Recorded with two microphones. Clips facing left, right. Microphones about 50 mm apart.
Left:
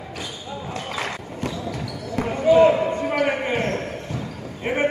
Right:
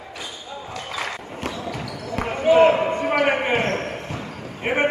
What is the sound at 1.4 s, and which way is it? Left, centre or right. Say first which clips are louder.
Basketball bounce: even; right.